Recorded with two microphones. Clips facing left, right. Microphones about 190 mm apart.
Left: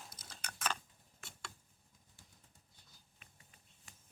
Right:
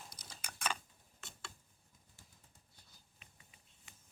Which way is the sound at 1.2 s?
20° right (ahead or behind).